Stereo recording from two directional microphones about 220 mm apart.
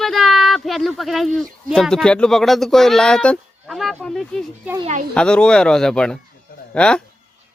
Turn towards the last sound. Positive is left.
turn(degrees=5)  # may be behind; listen again after turning